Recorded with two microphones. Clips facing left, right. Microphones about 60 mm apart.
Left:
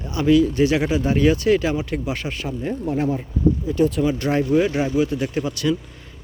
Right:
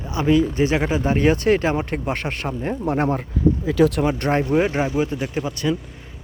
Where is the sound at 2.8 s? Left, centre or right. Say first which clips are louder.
Right 2 dB; right.